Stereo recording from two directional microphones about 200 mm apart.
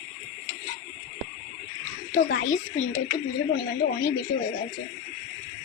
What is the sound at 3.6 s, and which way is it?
Speech, 50° left (ahead or behind).